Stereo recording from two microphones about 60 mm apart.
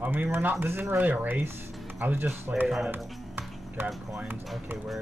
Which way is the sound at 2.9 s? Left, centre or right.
Right.